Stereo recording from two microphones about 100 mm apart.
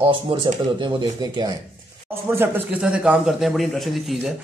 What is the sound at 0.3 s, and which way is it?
Speech, 70° right (ahead or behind).